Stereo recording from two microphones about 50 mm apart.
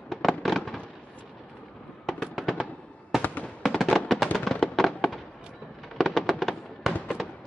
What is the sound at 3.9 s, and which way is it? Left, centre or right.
Music, centre.